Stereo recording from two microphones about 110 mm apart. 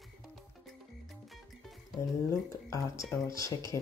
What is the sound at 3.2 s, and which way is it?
Speech, 30° left (ahead or behind).